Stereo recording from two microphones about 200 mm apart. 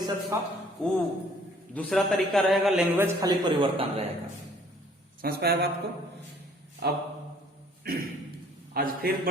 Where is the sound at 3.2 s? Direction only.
25° right (ahead or behind).